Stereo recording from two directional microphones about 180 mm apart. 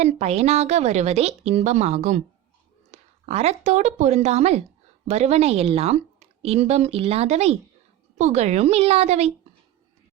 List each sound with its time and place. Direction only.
0.0 s a woman's voice: 40° right (ahead or behind)